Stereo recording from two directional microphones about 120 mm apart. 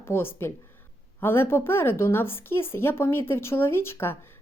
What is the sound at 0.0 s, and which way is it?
A woman's voice, 20° left (ahead or behind).